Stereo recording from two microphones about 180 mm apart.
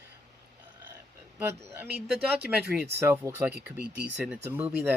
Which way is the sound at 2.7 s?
15° right (ahead or behind).